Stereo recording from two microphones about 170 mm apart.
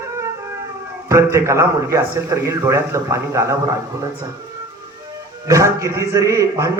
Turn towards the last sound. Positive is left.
turn(degrees=-20)  # may be behind; listen again after turning